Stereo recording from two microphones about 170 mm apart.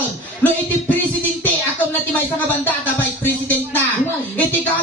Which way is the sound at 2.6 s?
10° left (ahead or behind).